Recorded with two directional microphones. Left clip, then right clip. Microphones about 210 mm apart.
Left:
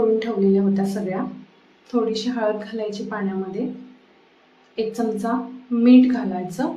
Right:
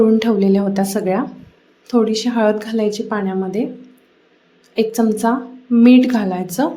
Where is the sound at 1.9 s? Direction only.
40° right (ahead or behind).